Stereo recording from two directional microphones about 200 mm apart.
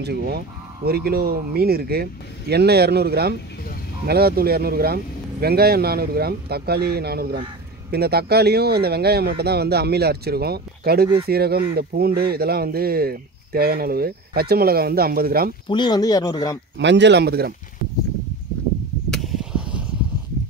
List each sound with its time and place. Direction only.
0.0 s speech: 55° right (ahead or behind)
15.7 s speech: 20° left (ahead or behind)
16.7 s speech: 60° right (ahead or behind)
19.0 s a sound: centre (ahead or behind)